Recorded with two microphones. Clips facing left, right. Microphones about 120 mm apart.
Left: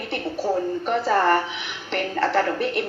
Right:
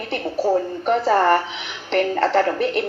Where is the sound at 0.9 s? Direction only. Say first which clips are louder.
Right 4 dB; 40° right (ahead or behind).